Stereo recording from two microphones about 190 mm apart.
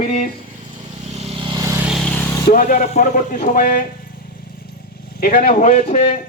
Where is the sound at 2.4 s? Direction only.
45° left (ahead or behind).